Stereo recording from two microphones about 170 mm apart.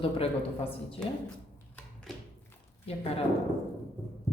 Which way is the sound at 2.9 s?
35° left (ahead or behind).